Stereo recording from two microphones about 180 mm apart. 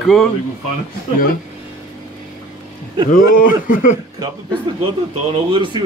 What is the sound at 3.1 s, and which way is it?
Speech, 50° left (ahead or behind).